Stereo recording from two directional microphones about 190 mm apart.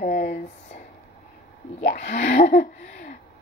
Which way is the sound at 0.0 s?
50° left (ahead or behind).